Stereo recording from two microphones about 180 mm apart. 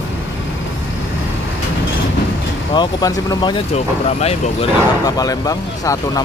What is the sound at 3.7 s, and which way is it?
Speech, 35° left (ahead or behind).